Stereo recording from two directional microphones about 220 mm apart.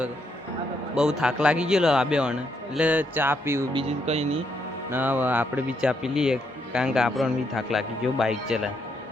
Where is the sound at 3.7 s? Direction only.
30° right (ahead or behind).